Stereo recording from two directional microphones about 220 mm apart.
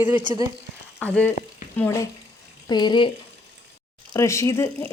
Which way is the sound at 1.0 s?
5° left (ahead or behind).